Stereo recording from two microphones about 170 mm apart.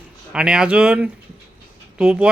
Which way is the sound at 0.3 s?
5° right (ahead or behind).